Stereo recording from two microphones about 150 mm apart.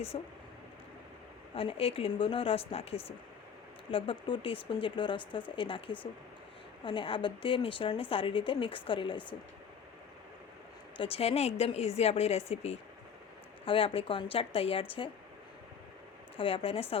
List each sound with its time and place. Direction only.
0.1 s speech: 40° left (ahead or behind)
1.5 s speech: 40° left (ahead or behind)
10.9 s speech: 40° left (ahead or behind)
16.4 s speech: 40° left (ahead or behind)